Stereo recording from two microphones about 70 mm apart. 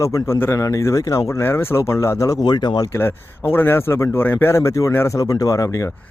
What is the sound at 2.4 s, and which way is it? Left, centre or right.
Speech, left.